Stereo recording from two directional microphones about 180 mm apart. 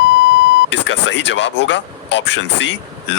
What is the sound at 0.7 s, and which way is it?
Speech, 90° left.